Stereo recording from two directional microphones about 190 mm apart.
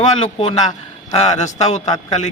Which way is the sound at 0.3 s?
30° left (ahead or behind).